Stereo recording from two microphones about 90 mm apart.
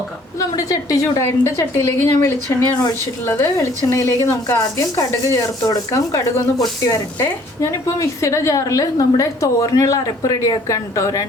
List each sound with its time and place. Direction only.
0.3 s a woman's voice: 40° left (ahead or behind)
3.8 s a woman's voice: 30° left (ahead or behind)